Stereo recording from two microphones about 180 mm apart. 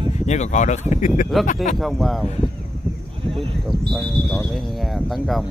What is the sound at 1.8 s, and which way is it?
Speech, centre (ahead or behind).